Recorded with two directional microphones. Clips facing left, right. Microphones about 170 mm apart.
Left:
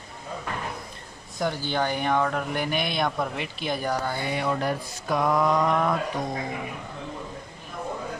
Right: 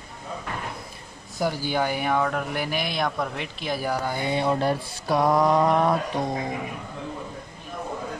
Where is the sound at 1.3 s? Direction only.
10° right (ahead or behind).